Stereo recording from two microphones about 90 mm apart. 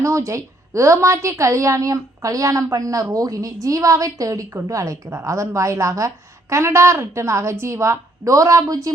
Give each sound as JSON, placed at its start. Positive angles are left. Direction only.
{"t": 0.0, "sound": "a woman's voice", "side_deg": -35}